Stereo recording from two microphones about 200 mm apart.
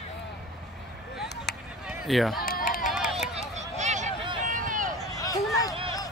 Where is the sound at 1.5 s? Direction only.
55° left (ahead or behind).